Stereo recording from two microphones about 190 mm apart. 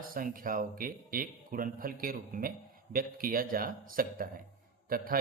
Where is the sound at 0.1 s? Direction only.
50° right (ahead or behind).